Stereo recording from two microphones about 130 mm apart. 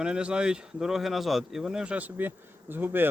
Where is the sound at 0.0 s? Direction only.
5° right (ahead or behind).